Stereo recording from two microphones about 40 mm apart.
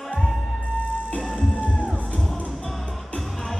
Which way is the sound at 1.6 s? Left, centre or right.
Left.